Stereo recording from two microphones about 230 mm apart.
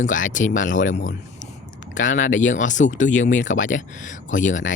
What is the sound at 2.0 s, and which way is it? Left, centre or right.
Speech, left.